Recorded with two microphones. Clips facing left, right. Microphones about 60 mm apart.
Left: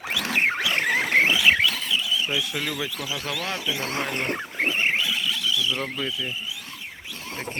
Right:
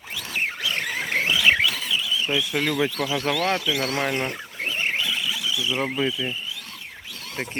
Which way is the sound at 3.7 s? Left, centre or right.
Left.